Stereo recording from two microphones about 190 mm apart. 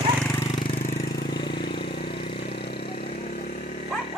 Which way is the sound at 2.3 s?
55° left (ahead or behind).